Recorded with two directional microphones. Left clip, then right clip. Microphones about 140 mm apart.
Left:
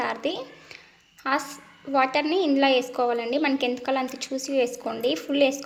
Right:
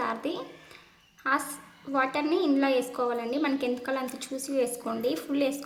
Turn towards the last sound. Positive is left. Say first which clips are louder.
# left 6 dB
turn(degrees=20)  # may be behind; listen again after turning